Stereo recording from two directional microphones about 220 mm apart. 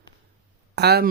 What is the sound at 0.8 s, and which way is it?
Speech, 50° right (ahead or behind).